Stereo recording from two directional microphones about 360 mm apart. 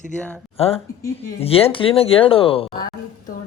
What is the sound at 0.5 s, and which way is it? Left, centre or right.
A woman's voice, centre.